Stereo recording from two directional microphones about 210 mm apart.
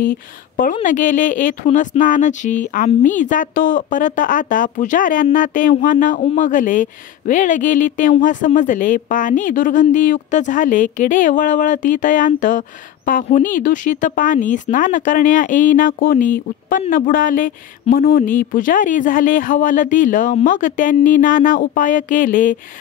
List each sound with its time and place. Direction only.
0.8 s speech: 35° left (ahead or behind)